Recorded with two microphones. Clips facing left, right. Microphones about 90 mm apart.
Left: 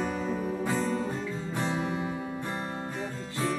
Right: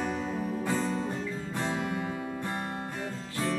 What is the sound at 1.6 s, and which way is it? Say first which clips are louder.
Music: left 1 dB; 20° left (ahead or behind).